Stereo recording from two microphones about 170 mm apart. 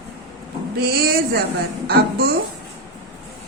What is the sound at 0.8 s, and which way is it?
A woman's voice, 65° right (ahead or behind).